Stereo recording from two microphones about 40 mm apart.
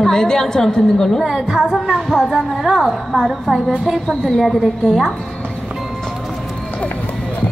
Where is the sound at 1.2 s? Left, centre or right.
Centre.